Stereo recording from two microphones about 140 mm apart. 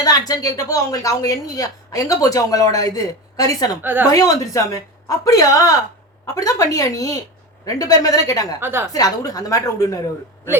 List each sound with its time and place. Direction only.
0.0 s speech: 25° left (ahead or behind)
8.6 s a woman's voice: 15° right (ahead or behind)
8.9 s speech: 25° left (ahead or behind)